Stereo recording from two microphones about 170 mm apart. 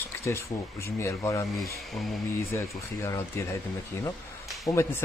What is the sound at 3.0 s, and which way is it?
Speech, 15° left (ahead or behind).